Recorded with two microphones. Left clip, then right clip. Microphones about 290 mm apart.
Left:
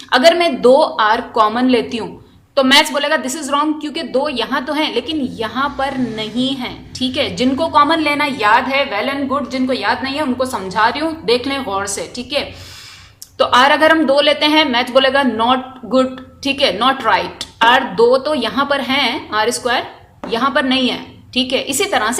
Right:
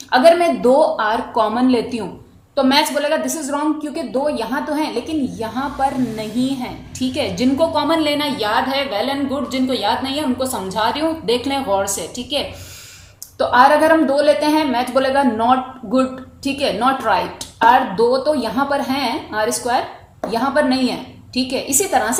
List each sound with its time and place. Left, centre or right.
0.1 s a woman's voice: left
8.4 s a woman's voice: centre
9.0 s a woman's voice: left